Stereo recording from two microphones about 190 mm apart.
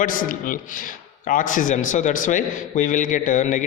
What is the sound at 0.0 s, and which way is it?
A man's voice, 45° left (ahead or behind).